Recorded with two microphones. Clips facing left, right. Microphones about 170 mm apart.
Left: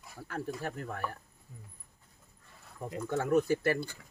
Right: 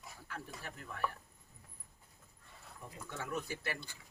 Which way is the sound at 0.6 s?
50° left (ahead or behind).